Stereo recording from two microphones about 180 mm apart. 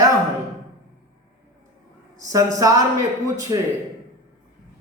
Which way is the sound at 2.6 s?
20° right (ahead or behind).